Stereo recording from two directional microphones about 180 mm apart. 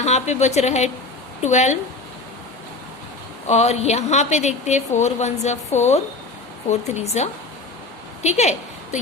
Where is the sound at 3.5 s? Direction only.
40° left (ahead or behind).